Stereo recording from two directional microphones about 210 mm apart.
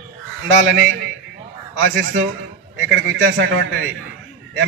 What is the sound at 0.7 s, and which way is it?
A man's voice, 60° right (ahead or behind).